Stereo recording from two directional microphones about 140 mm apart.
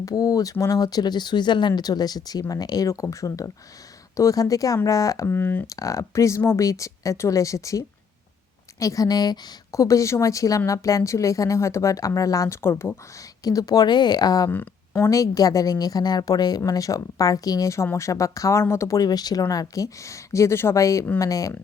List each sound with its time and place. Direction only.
0.0 s a woman's voice: 25° left (ahead or behind)
14.5 s a woman's voice: 15° left (ahead or behind)